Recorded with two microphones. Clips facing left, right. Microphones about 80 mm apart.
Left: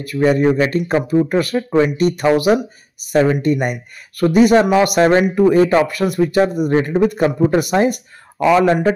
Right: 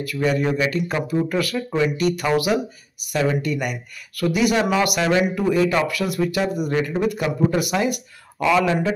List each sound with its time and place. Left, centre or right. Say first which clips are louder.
0.0 s speech: left 7 dB; left